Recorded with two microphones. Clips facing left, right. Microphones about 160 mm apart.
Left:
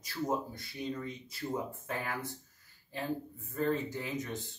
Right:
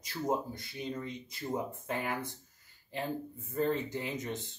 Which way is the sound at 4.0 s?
20° right (ahead or behind).